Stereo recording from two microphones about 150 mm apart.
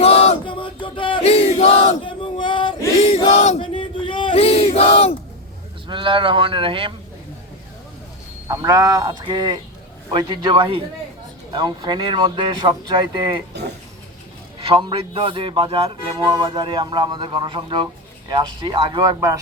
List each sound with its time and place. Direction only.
0.0 s chant: 45° left (ahead or behind)
5.9 s a man's voice: 35° right (ahead or behind)
8.4 s a man's voice: 20° right (ahead or behind)
13.5 s a sound: 90° right
14.6 s a man's voice: 35° right (ahead or behind)